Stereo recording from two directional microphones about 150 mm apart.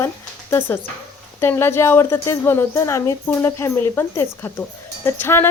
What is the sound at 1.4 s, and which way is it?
A woman's voice, 15° left (ahead or behind).